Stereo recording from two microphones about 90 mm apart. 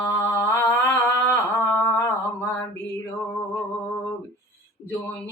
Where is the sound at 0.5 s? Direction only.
25° left (ahead or behind).